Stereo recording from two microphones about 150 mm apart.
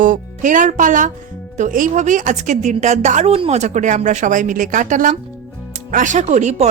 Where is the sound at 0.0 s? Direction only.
60° right (ahead or behind).